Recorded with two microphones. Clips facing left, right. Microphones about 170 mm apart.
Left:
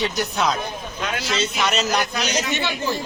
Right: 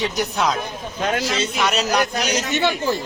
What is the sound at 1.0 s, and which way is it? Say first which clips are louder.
Speech: right 5 dB; 40° right (ahead or behind).